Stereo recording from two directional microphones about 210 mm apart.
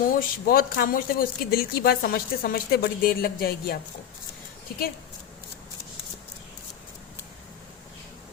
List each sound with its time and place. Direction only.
0.0 s speech: 40° left (ahead or behind)